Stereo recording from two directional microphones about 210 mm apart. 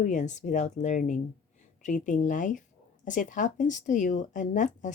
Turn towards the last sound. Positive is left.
turn(degrees=35)  # may be behind; listen again after turning